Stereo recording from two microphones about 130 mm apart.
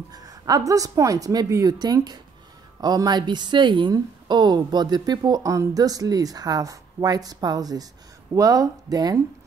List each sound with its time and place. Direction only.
0.1 s a woman's voice: 30° right (ahead or behind)